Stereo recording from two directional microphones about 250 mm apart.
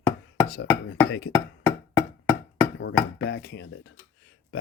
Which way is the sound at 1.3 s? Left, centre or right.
Centre.